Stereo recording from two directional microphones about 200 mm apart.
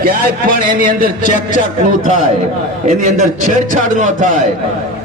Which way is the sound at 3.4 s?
40° right (ahead or behind).